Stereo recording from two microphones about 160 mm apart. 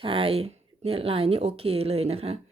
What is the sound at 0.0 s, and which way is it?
Speech, 35° right (ahead or behind).